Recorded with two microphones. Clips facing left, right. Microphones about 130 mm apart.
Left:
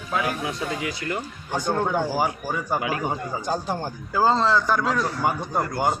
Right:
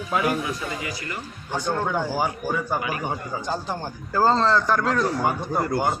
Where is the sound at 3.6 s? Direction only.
10° left (ahead or behind).